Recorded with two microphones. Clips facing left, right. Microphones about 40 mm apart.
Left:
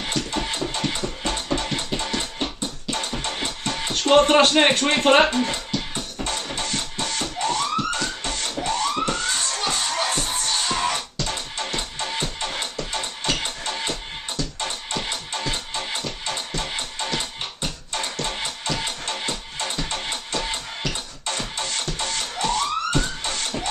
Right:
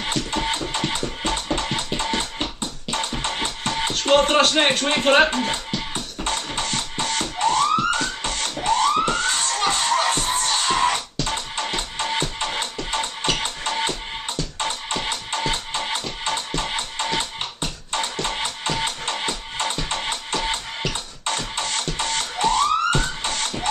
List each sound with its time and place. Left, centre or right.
0.0 s music: right
4.1 s music: centre
4.6 s speech: centre
5.3 s speech: right
7.2 s music: right